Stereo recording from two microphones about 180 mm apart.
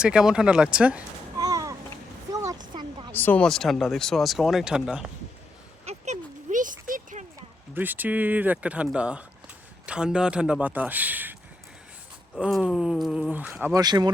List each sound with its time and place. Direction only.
0.0 s speech: 5° right (ahead or behind)
1.4 s a sound: 20° right (ahead or behind)
3.1 s speech: 10° left (ahead or behind)
5.8 s a sound: 40° right (ahead or behind)
7.7 s a man's voice: 10° right (ahead or behind)
12.4 s speech: centre (ahead or behind)
13.7 s speech: 20° right (ahead or behind)